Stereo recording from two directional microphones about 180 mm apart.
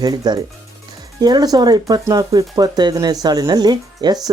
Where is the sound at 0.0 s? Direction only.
20° right (ahead or behind).